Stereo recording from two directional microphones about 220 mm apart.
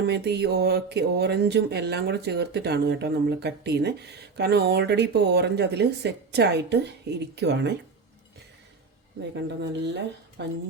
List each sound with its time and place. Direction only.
0.1 s speech: 50° right (ahead or behind)
9.6 s speech: 50° right (ahead or behind)